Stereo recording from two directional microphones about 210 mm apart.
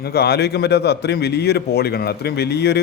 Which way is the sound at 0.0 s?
50° left (ahead or behind).